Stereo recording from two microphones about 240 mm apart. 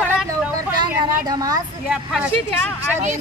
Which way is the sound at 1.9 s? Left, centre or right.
Centre.